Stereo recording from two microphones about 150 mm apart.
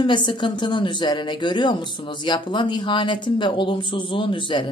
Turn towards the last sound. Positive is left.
turn(degrees=35)  # may be behind; listen again after turning